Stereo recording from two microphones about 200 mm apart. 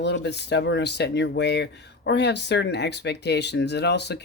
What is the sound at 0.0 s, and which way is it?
Speech, 60° left (ahead or behind).